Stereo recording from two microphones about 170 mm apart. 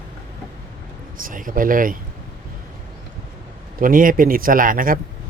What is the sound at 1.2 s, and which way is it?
Speech, 55° right (ahead or behind).